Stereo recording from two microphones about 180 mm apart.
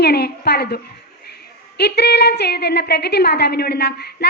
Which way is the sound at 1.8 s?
65° left (ahead or behind).